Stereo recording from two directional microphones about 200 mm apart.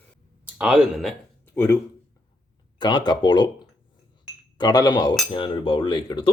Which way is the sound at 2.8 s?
20° left (ahead or behind).